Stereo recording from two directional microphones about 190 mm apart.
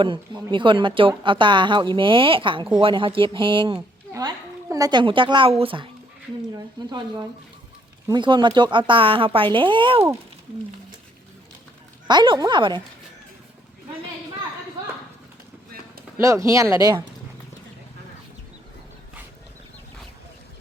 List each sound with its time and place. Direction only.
0.0 s speech: 25° right (ahead or behind)
8.0 s speech: 25° right (ahead or behind)
12.0 s speech: 25° right (ahead or behind)
15.7 s a sound: 50° right (ahead or behind)
16.2 s speech: 15° right (ahead or behind)